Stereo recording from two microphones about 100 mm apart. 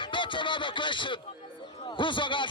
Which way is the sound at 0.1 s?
55° left (ahead or behind).